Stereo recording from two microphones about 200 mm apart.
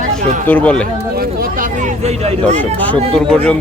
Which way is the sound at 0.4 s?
5° left (ahead or behind).